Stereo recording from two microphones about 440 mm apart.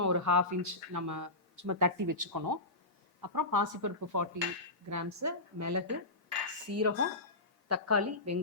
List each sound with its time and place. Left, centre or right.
0.0 s speech: right